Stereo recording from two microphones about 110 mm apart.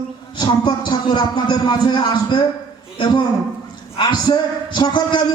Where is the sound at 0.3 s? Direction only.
45° left (ahead or behind).